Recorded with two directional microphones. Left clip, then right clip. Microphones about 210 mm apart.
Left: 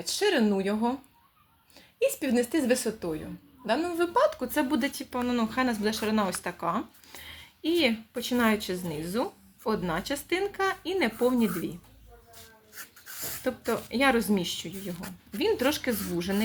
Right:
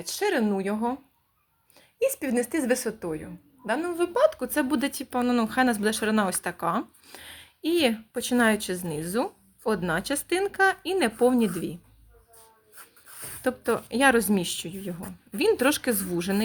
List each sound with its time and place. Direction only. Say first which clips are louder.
0.0 s a woman's voice: even; 25° right (ahead or behind)
2.0 s a woman's voice: right 1 dB; 25° right (ahead or behind); by 11.7 s 45° right (ahead or behind)
13.4 s speech: right 4 dB; 45° right (ahead or behind)